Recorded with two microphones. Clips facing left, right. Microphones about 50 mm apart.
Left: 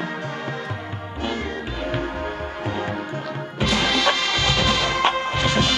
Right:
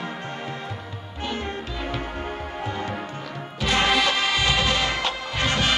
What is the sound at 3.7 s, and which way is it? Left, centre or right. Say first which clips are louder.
Music: right 1 dB; right.